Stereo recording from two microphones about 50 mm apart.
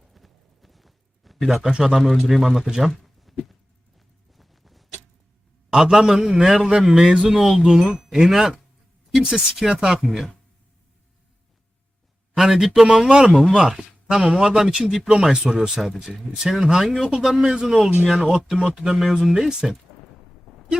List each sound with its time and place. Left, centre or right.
0.1 s clip-clop: centre
1.6 s speech: centre
4.4 s vehicle: centre
5.7 s speech: centre
9.6 s speech: centre
10.0 s speech: centre
12.4 s speech: centre
20.5 s a sound: centre